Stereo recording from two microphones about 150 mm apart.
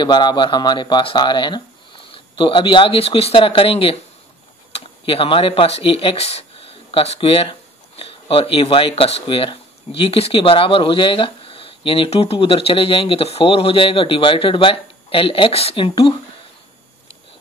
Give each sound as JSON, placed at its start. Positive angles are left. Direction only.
{"t": 0.0, "sound": "speech", "side_deg": 30}